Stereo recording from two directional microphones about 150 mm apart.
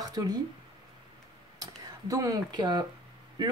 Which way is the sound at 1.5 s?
25° right (ahead or behind).